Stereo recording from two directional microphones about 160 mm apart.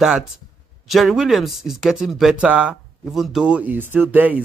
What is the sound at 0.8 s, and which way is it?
Speech, centre (ahead or behind).